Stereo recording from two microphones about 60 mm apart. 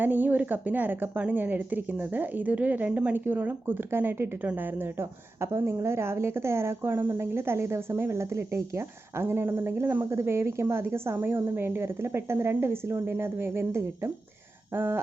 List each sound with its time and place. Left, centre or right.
0.0 s a woman's voice: right
4.9 s a woman's voice: right
10.1 s a woman's voice: right